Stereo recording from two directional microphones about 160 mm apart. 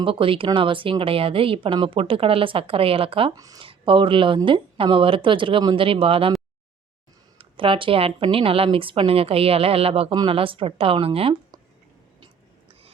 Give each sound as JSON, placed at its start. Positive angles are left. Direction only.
{"t": 0.0, "sound": "speech", "side_deg": -35}
{"t": 3.3, "sound": "speech", "side_deg": -20}
{"t": 3.7, "sound": "speech", "side_deg": -35}
{"t": 7.3, "sound": "speech", "side_deg": -35}